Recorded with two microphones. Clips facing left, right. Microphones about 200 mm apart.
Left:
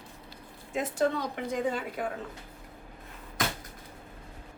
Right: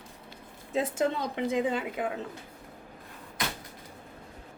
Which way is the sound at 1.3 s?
20° right (ahead or behind).